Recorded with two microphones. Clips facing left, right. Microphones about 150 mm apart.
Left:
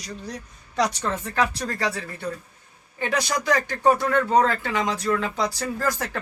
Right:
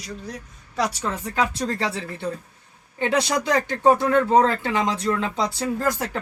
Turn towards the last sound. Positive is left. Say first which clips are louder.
# right 2 dB
turn(degrees=-20)  # may be behind; listen again after turning